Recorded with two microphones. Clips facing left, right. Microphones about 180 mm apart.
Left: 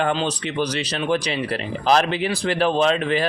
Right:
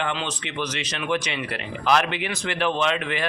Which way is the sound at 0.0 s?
35° left (ahead or behind).